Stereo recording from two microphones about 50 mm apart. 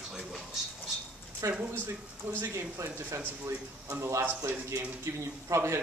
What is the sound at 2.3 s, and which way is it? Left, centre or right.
Speech, right.